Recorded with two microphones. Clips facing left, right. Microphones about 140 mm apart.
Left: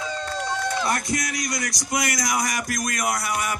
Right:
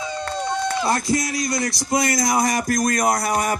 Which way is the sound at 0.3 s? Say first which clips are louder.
Right 4 dB; 20° right (ahead or behind).